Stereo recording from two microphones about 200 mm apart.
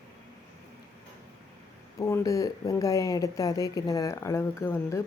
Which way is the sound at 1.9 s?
15° left (ahead or behind).